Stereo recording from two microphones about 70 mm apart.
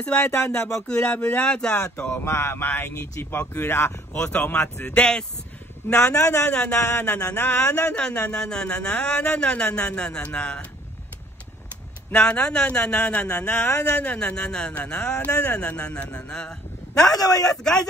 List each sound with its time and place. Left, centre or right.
0.0 s speech: centre
2.0 s speech: left
4.1 s speech: left
5.9 s a man's voice: left
6.5 s speech: centre
7.3 s speech: left
12.1 s speech: centre
17.1 s a man's voice: left